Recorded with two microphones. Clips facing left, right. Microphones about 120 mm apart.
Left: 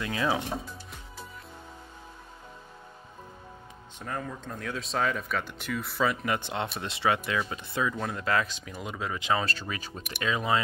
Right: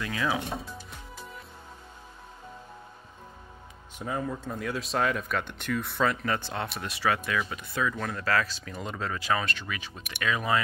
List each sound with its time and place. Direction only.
0.0 s speech: 25° left (ahead or behind)
4.0 s speech: 10° right (ahead or behind)
6.2 s speech: 15° left (ahead or behind)
8.7 s speech: 10° left (ahead or behind)
9.4 s speech: 35° left (ahead or behind)
10.2 s speech: 25° left (ahead or behind)